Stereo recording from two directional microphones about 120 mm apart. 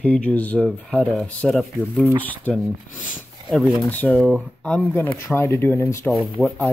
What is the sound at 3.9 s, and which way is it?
Speech, 10° left (ahead or behind).